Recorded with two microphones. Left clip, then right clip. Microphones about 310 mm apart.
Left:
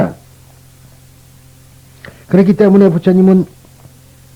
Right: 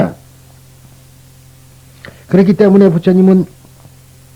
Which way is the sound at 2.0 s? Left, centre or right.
Left.